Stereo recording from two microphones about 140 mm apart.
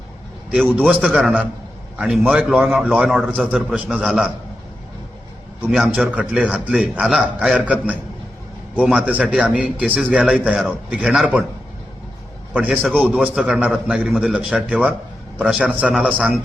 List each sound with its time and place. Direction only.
0.5 s a man's voice: centre (ahead or behind)
5.7 s a man's voice: 5° right (ahead or behind)
12.6 s a man's voice: 5° right (ahead or behind)